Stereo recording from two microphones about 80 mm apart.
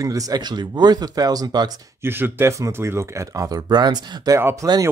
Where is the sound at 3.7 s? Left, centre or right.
Right.